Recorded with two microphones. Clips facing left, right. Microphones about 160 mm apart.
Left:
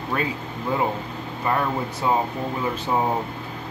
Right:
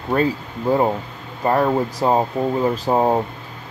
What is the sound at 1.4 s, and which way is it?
Speech, 40° right (ahead or behind).